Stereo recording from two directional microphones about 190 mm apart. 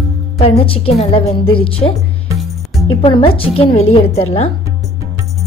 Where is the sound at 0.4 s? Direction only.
30° left (ahead or behind).